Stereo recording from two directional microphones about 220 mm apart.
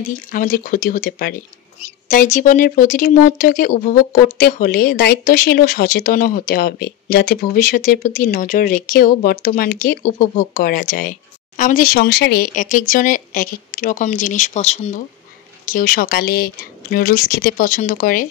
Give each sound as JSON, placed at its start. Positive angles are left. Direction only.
{"t": 0.1, "sound": "speech", "side_deg": 35}